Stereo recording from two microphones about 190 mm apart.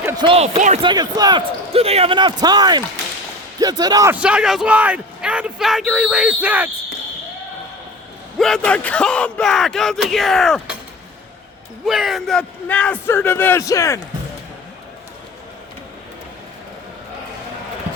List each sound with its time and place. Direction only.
0.0 s speech: 20° right (ahead or behind)
4.1 s a man's voice: 5° right (ahead or behind)
8.4 s a man's voice: 5° left (ahead or behind)
11.9 s a man's voice: centre (ahead or behind); by 14.0 s 15° left (ahead or behind)